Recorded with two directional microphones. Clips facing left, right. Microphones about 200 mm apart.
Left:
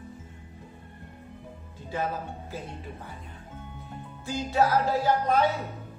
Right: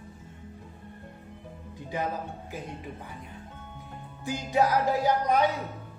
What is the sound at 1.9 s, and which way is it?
Music, 15° right (ahead or behind).